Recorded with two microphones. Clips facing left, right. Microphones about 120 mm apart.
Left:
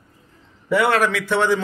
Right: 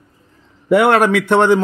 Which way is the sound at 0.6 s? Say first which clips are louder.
Right 6 dB; 55° right (ahead or behind).